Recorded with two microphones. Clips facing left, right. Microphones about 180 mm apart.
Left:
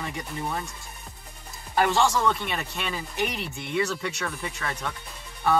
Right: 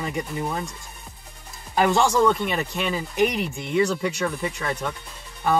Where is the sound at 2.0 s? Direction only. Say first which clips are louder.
Right 4 dB; 10° right (ahead or behind).